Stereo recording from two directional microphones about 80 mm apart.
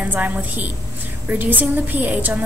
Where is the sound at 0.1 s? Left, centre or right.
Right.